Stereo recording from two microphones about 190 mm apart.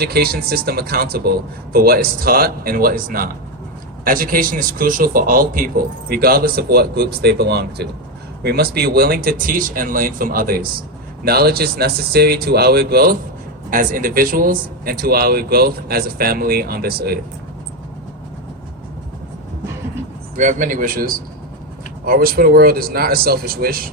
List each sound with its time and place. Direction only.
0.0 s speech: 55° right (ahead or behind)
20.3 s speech: 40° right (ahead or behind)